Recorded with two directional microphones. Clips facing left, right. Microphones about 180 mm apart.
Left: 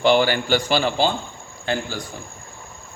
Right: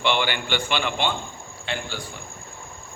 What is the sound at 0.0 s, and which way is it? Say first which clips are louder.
A man's voice: left 7 dB; 40° left (ahead or behind).